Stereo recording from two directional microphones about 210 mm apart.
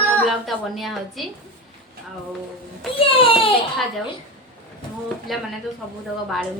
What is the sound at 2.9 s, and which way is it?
Speech, 25° left (ahead or behind).